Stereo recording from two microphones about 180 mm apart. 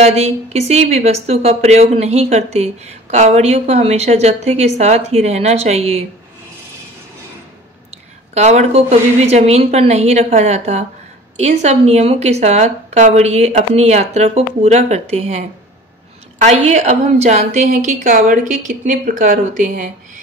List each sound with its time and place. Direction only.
0.0 s a woman's voice: 35° right (ahead or behind)
8.4 s a woman's voice: 40° right (ahead or behind)